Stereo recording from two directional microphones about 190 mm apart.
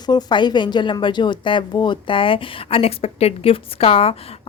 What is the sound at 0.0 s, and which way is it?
Speech, 20° left (ahead or behind).